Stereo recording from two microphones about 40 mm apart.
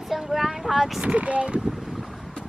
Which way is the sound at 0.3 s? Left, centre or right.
Centre.